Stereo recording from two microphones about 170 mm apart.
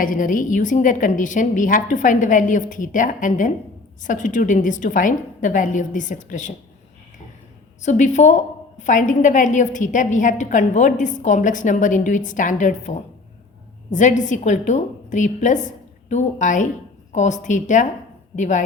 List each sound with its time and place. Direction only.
0.0 s a woman's voice: 50° left (ahead or behind)
7.8 s a woman's voice: 45° left (ahead or behind)